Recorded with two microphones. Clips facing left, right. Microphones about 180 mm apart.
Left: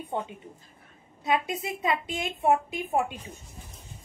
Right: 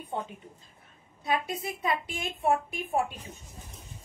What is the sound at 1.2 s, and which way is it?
A woman's voice, 20° left (ahead or behind).